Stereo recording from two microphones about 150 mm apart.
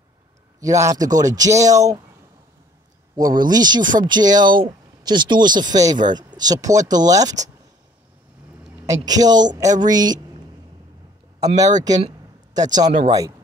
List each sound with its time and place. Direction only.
0.6 s speech: 20° right (ahead or behind)
3.2 s speech: 25° right (ahead or behind)
8.8 s speech: 25° right (ahead or behind)
11.4 s speech: 25° right (ahead or behind)